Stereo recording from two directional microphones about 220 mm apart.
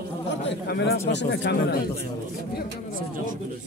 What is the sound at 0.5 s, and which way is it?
Speech, 50° left (ahead or behind).